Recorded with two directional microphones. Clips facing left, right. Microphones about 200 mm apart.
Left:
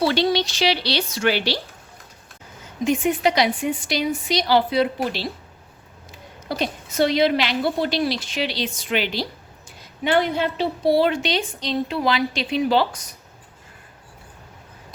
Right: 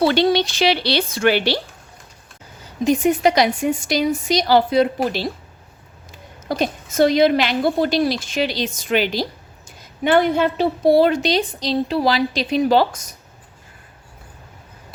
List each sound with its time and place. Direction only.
0.0 s speech: 55° right (ahead or behind)
2.8 s a woman's voice: 40° right (ahead or behind)
6.5 s a woman's voice: 45° right (ahead or behind)